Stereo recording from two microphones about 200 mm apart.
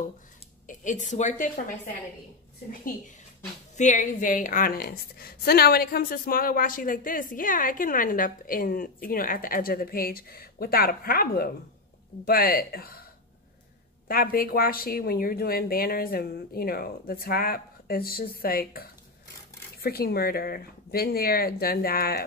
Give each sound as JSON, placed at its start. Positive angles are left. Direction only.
{"t": 0.7, "sound": "speech", "side_deg": 40}
{"t": 3.7, "sound": "a woman's voice", "side_deg": 40}
{"t": 14.0, "sound": "a woman's voice", "side_deg": 45}